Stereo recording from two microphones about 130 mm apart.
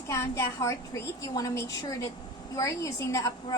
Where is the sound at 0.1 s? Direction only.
20° left (ahead or behind).